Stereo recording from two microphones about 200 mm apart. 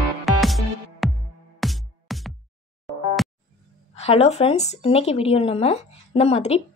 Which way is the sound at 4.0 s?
30° left (ahead or behind).